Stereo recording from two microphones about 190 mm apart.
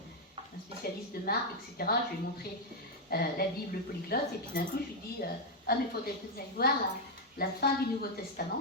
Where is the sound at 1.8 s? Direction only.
55° left (ahead or behind).